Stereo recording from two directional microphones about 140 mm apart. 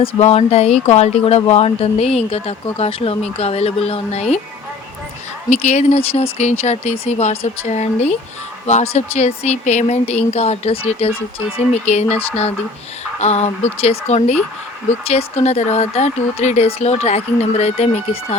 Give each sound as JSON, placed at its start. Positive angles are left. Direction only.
{"t": 0.0, "sound": "speech", "side_deg": 45}
{"t": 5.5, "sound": "speech", "side_deg": 55}